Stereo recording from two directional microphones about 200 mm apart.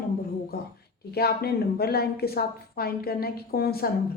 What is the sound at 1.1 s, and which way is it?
A woman's voice, 50° left (ahead or behind).